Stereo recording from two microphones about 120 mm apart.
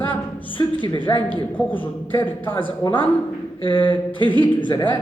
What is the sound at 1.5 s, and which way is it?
Speech, 15° left (ahead or behind).